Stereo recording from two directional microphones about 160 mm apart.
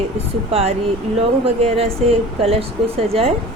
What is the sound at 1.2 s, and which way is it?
Speech, 40° right (ahead or behind).